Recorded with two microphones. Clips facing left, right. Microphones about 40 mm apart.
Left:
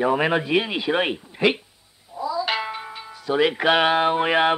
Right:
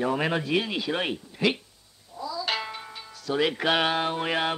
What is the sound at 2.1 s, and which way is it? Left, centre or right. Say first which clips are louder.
Cat: left 6 dB; centre.